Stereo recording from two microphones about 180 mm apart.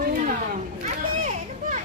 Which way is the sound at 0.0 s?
50° right (ahead or behind).